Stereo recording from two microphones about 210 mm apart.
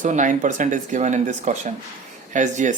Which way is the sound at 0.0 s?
35° right (ahead or behind).